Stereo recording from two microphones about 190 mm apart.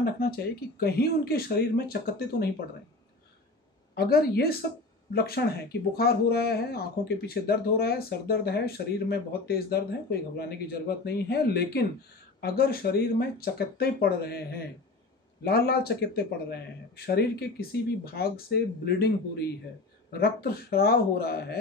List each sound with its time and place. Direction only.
0.7 s speech: 55° left (ahead or behind)
3.9 s speech: 55° left (ahead or behind)